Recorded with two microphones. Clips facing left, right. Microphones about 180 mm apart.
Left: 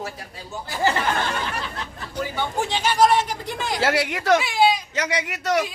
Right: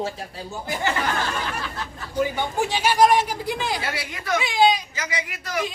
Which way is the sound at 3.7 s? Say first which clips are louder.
Left 8 dB; 75° left (ahead or behind).